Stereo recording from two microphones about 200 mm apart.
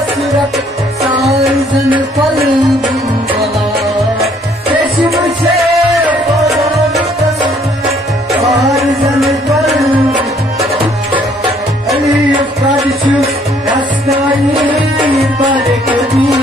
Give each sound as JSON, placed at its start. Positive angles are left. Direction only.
{"t": 5.1, "sound": "music", "side_deg": 0}
{"t": 8.5, "sound": "music", "side_deg": 0}
{"t": 15.0, "sound": "music", "side_deg": -25}